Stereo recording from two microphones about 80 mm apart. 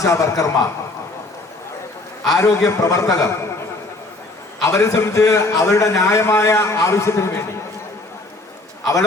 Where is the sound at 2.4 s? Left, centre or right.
Left.